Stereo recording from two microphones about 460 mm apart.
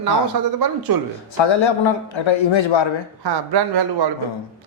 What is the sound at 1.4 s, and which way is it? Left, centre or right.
Speech, left.